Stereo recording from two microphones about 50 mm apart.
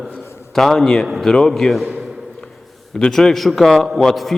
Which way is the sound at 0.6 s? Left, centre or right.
Centre.